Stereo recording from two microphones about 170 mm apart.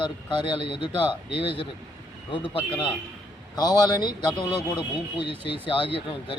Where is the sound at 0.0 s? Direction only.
30° left (ahead or behind).